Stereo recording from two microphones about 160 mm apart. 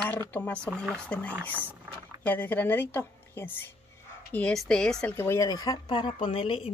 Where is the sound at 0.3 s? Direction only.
10° left (ahead or behind).